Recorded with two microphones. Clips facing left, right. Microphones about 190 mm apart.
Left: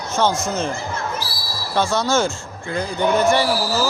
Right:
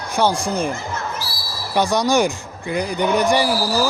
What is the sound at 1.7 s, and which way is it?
Speech, 15° right (ahead or behind).